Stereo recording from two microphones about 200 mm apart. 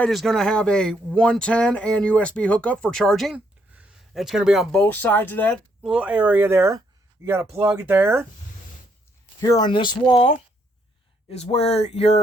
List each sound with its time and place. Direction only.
0.0 s speech: centre (ahead or behind)
5.9 s speech: 5° right (ahead or behind)
9.4 s speech: 20° left (ahead or behind)
11.3 s a sound: 30° left (ahead or behind)